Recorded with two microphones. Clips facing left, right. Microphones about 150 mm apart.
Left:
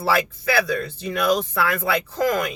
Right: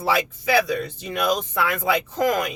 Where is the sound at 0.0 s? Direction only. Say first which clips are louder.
Left 1 dB; 15° right (ahead or behind).